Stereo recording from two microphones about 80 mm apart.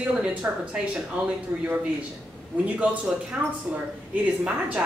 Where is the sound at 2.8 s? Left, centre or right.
Centre.